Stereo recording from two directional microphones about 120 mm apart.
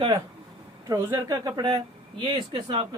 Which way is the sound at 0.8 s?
25° right (ahead or behind).